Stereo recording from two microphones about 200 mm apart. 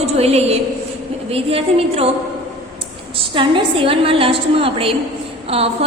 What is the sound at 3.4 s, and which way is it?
A woman's voice, 25° right (ahead or behind).